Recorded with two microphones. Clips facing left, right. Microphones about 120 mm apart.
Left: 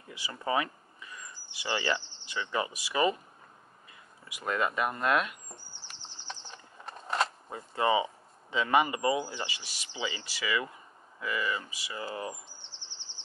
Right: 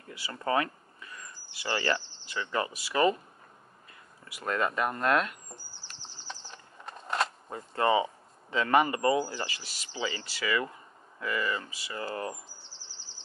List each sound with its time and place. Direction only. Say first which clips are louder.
0.1 s speech: right 2 dB; 20° left (ahead or behind)
4.2 s speech: right 1 dB; 15° left (ahead or behind)
5.9 s a sound: even; centre (ahead or behind)
7.7 s speech: right 1 dB; 15° left (ahead or behind)
12.5 s insect: even; 5° right (ahead or behind)